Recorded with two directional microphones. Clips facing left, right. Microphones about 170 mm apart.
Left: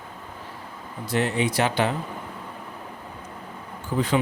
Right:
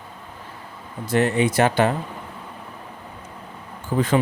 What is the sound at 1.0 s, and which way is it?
Speech, 50° right (ahead or behind).